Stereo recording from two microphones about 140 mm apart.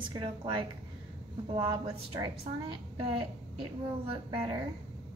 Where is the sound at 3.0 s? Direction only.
40° right (ahead or behind).